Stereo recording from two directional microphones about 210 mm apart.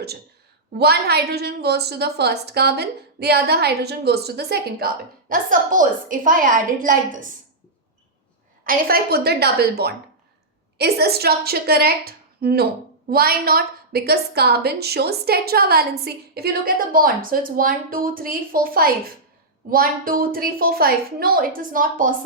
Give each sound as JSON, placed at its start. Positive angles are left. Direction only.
{"t": 0.8, "sound": "a woman's voice", "side_deg": -50}
{"t": 5.3, "sound": "a woman's voice", "side_deg": -40}
{"t": 8.6, "sound": "a woman's voice", "side_deg": -45}